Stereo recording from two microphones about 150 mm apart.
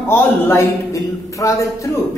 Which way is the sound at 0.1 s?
15° left (ahead or behind).